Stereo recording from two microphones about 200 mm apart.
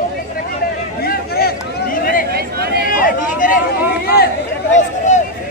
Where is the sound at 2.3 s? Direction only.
50° right (ahead or behind).